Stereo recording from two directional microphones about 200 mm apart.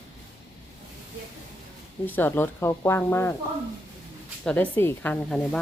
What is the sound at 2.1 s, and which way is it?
Speech, 10° left (ahead or behind).